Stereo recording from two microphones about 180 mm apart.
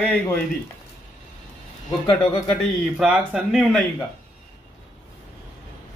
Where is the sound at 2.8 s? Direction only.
5° right (ahead or behind).